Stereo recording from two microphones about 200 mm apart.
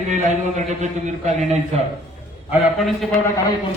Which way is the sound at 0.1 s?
35° right (ahead or behind).